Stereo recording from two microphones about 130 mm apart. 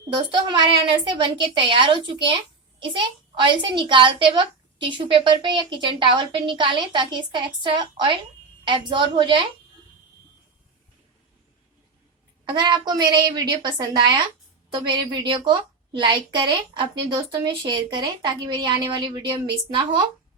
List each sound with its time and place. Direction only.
0.1 s a woman's voice: 35° right (ahead or behind)
12.5 s a woman's voice: 35° right (ahead or behind)